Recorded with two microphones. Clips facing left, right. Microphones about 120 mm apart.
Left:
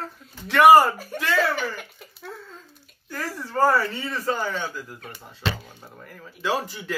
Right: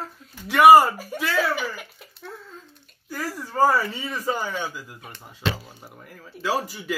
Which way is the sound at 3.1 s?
10° right (ahead or behind).